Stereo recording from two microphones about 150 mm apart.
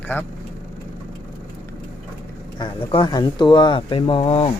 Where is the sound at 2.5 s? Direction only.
30° left (ahead or behind).